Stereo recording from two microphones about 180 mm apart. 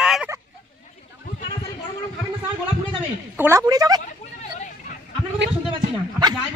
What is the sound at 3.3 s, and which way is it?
Speech, 15° right (ahead or behind).